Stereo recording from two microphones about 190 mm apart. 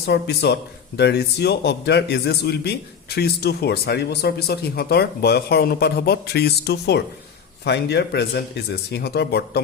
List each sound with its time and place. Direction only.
0.0 s speech: 60° left (ahead or behind)